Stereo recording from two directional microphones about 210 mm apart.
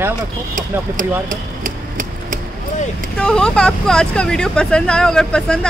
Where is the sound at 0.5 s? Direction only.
40° right (ahead or behind).